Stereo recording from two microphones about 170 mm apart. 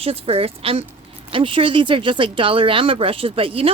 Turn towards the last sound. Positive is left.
turn(degrees=-35)  # may be behind; listen again after turning